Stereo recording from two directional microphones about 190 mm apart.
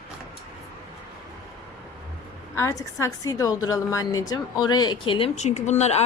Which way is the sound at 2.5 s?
15° left (ahead or behind).